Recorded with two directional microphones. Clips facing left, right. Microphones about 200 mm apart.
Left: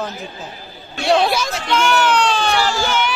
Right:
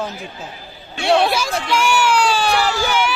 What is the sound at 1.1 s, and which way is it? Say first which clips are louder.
Speech: even; 5° right (ahead or behind).